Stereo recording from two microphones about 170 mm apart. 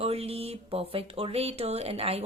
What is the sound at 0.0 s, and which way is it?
Speech, 35° right (ahead or behind).